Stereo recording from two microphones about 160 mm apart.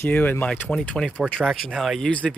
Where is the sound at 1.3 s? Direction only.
Centre (ahead or behind).